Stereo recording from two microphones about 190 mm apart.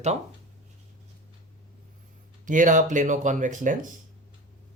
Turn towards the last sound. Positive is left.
turn(degrees=-45)  # may be behind; listen again after turning